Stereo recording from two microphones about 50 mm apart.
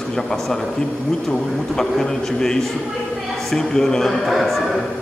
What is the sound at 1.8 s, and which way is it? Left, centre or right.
A man's voice, centre.